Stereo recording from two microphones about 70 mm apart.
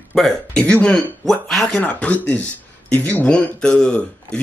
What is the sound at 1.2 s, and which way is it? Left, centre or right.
Speech, centre.